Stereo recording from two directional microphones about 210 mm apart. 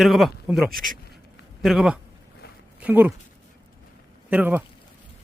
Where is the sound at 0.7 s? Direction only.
40° right (ahead or behind).